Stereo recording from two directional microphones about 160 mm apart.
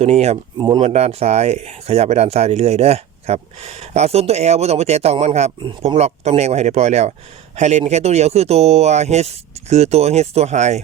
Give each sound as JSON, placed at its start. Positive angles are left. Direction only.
{"t": 0.0, "sound": "speech", "side_deg": -40}
{"t": 0.6, "sound": "speech", "side_deg": -30}